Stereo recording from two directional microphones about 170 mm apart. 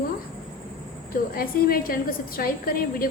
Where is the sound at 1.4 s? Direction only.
60° left (ahead or behind).